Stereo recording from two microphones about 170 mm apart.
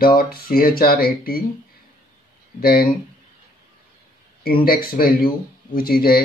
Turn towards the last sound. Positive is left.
turn(degrees=60)  # may be behind; listen again after turning